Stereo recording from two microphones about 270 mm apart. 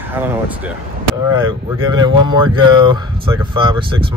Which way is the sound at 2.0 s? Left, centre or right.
Centre.